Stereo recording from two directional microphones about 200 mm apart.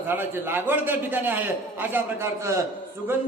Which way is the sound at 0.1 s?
10° right (ahead or behind).